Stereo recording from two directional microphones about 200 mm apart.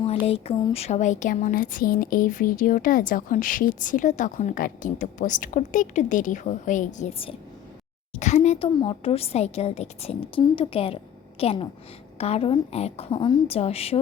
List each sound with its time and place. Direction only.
0.3 s speech: 30° left (ahead or behind)